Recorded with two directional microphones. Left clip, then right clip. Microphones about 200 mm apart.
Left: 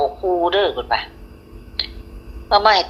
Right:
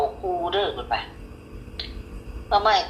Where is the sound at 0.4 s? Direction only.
45° left (ahead or behind).